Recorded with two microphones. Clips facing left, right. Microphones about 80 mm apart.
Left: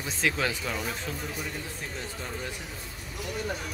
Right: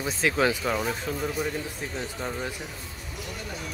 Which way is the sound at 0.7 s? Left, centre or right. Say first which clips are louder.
Right 5 dB; right.